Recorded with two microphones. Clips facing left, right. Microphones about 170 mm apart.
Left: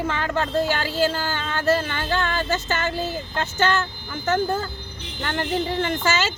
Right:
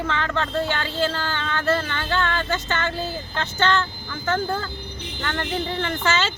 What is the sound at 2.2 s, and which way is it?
Speech, 10° left (ahead or behind).